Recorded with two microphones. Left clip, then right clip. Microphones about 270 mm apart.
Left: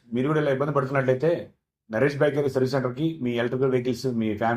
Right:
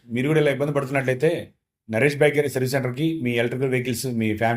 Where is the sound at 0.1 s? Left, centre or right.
Right.